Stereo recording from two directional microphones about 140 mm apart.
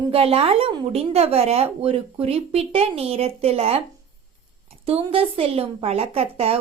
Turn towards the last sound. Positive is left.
turn(degrees=-45)  # may be behind; listen again after turning